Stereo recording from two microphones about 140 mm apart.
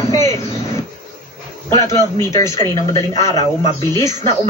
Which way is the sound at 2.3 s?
25° left (ahead or behind).